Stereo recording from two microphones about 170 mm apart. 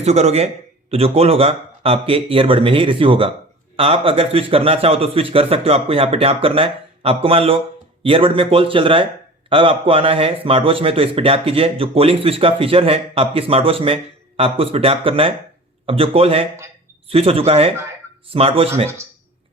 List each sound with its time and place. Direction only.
0.0 s a man's voice: 40° right (ahead or behind)